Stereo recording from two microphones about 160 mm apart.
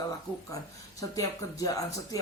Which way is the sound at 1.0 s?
20° left (ahead or behind).